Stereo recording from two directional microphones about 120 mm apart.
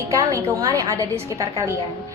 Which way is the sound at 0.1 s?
25° right (ahead or behind).